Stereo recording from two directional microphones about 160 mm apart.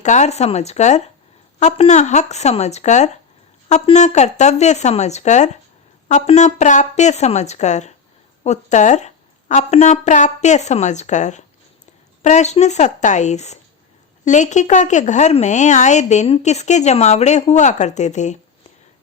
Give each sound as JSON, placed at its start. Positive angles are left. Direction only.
{"t": 0.0, "sound": "a woman's voice", "side_deg": 45}